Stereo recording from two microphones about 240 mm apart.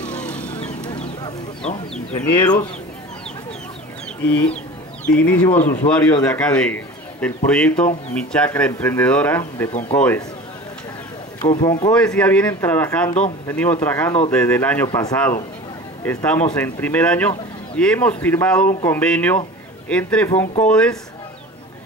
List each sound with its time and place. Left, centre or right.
0.0 s vehicle: centre
2.3 s speech: centre
5.0 s a man's voice: centre
9.7 s speech: left
9.9 s speech: centre
11.4 s speech: centre
11.9 s a man's voice: centre